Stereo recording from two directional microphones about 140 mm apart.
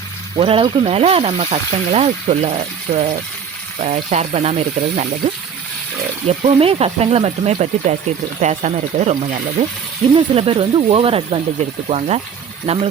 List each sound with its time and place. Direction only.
0.3 s speech: 40° right (ahead or behind)
10.2 s speech: 40° right (ahead or behind)